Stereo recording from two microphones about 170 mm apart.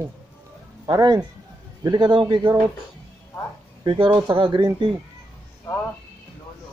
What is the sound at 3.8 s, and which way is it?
Speech, 30° right (ahead or behind).